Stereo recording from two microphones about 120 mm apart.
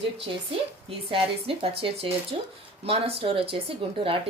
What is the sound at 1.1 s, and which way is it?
A woman's voice, 50° right (ahead or behind).